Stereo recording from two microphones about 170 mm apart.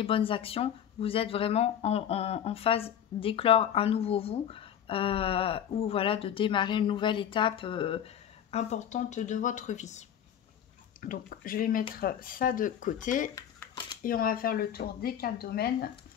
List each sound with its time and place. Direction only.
0.0 s speech: 30° left (ahead or behind)
11.0 s speech: 55° left (ahead or behind)
13.3 s a sound: 20° left (ahead or behind)
14.0 s speech: 60° left (ahead or behind)